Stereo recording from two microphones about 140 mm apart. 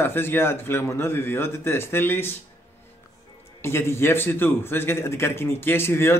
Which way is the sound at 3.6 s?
20° left (ahead or behind).